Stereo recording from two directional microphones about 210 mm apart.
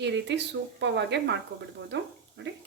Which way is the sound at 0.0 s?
55° right (ahead or behind).